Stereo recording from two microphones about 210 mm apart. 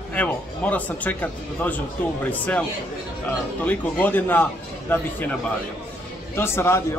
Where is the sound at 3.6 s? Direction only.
10° left (ahead or behind).